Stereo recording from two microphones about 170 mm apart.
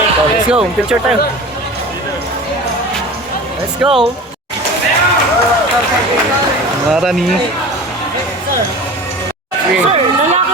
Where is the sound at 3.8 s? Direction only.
5° right (ahead or behind).